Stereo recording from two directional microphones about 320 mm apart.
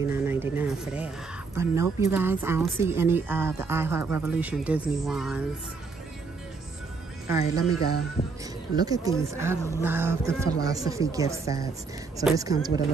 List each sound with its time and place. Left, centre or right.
0.0 s a woman's voice: centre
7.4 s speech: left
8.7 s a woman's voice: centre